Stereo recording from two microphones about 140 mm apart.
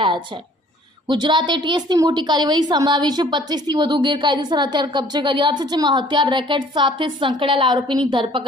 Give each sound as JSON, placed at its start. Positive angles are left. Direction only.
{"t": 1.0, "sound": "a woman's voice", "side_deg": -35}